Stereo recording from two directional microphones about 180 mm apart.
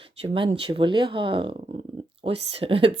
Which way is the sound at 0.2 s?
30° right (ahead or behind).